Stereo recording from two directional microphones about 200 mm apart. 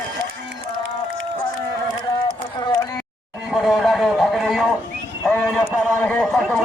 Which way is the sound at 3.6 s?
Centre (ahead or behind).